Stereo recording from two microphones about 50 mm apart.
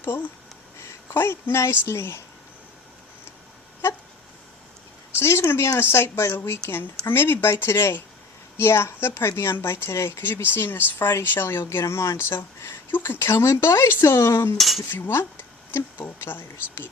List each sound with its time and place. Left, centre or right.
0.0 s speech: left
2.0 s speech: left
5.1 s speech: left
11.9 s speech: left
12.3 s speech: left
13.0 s speech: left
14.8 s speech: left